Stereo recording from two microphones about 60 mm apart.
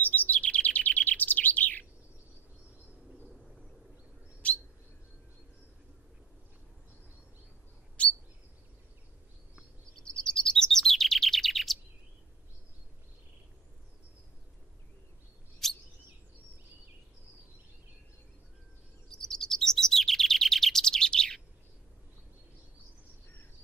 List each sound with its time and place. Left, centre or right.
0.0 s bird: left
4.4 s bird: left
8.0 s chirp: left
9.9 s chirp: centre
15.6 s chirp: centre
19.0 s chirp: centre